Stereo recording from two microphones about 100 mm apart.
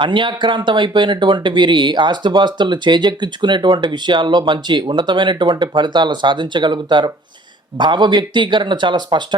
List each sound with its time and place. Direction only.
0.0 s speech: 55° right (ahead or behind)